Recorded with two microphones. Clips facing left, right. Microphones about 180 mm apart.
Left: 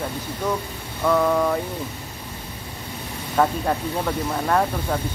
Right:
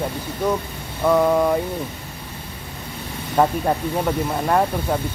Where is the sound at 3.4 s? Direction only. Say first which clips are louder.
Right 2 dB; 15° right (ahead or behind).